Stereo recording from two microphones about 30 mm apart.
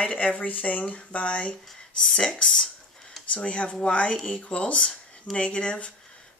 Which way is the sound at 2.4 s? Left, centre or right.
Centre.